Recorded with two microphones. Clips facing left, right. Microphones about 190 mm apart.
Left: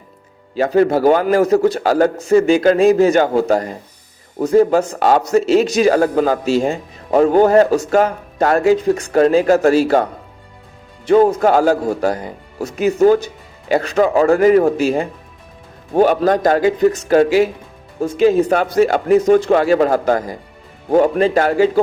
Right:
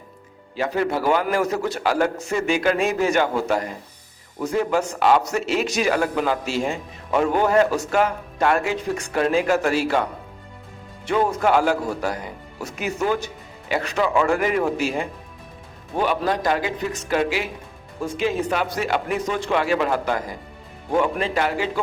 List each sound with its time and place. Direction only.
0.5 s a man's voice: 40° left (ahead or behind)